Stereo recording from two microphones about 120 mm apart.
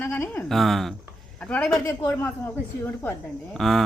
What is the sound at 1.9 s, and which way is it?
A woman's voice, 20° left (ahead or behind).